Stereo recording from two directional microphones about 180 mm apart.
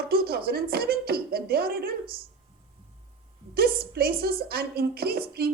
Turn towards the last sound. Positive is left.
turn(degrees=-60)  # may be behind; listen again after turning